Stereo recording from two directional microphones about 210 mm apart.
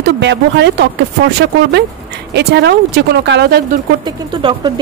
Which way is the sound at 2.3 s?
50° right (ahead or behind).